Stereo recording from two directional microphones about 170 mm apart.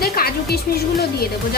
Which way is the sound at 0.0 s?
65° left (ahead or behind).